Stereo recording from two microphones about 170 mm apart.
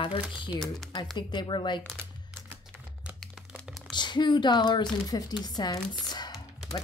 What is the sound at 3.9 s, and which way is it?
Speech, 25° left (ahead or behind).